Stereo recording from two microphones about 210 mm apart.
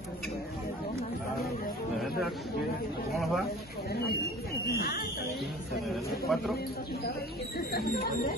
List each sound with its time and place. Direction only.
2.0 s a sound: centre (ahead or behind)
3.2 s speech: centre (ahead or behind)
4.7 s speech: 50° left (ahead or behind)
6.2 s speech: centre (ahead or behind)
7.7 s speech: 45° left (ahead or behind)